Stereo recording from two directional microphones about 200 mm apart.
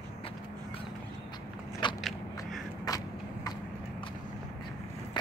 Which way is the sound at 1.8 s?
25° left (ahead or behind).